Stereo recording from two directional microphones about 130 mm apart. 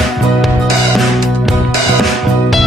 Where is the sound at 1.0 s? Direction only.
Centre (ahead or behind).